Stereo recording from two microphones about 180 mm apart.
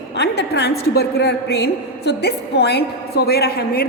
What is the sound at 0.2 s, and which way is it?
A woman's voice, 65° left (ahead or behind).